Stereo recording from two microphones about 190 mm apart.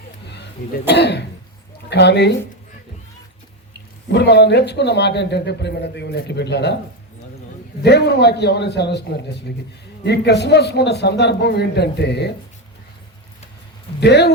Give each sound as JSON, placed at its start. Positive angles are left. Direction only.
{"t": 0.9, "sound": "a man's voice", "side_deg": 60}
{"t": 4.1, "sound": "a man's voice", "side_deg": 65}
{"t": 7.8, "sound": "a man's voice", "side_deg": 60}
{"t": 14.0, "sound": "a man's voice", "side_deg": 60}